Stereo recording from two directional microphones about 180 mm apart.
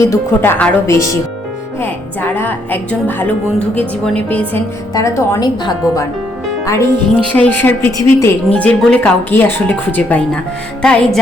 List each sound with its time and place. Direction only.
0.1 s speech: 10° left (ahead or behind)
10.8 s music: 5° left (ahead or behind)